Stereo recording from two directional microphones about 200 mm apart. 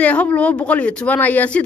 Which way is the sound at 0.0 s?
5° left (ahead or behind).